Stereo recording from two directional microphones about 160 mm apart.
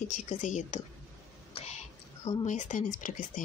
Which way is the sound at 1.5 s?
40° left (ahead or behind).